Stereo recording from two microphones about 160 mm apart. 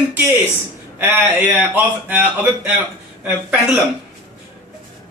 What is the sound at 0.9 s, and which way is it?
Speech, 10° right (ahead or behind).